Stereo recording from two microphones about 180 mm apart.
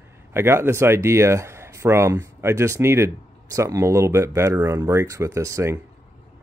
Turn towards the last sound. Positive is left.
turn(degrees=-15)  # may be behind; listen again after turning